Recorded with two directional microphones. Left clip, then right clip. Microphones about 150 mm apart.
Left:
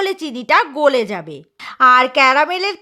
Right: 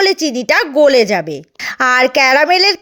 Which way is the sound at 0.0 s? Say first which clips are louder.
Right 8 dB; 15° right (ahead or behind).